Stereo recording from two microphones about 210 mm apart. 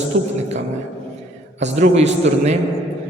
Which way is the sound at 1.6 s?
30° right (ahead or behind).